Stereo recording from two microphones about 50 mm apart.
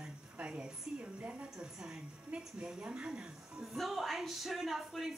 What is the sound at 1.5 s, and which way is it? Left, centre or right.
A woman's voice, centre.